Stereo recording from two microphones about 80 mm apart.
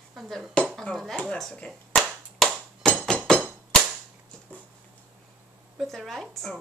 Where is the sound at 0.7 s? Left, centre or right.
Centre.